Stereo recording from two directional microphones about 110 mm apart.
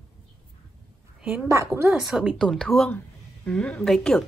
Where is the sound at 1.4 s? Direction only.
25° right (ahead or behind).